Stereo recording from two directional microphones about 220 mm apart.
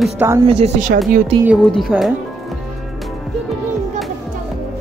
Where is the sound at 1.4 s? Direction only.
Centre (ahead or behind).